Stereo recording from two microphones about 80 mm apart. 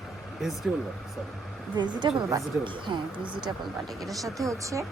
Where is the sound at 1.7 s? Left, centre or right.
Right.